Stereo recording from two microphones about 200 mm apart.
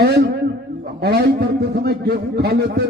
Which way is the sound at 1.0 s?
50° right (ahead or behind).